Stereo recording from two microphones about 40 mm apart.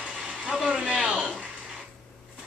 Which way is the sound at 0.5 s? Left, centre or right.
Centre.